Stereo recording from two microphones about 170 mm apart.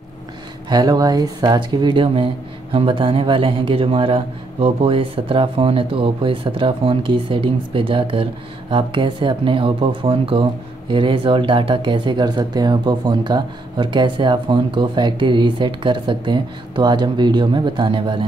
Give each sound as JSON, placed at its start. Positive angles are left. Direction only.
{"t": 0.7, "sound": "speech", "side_deg": -25}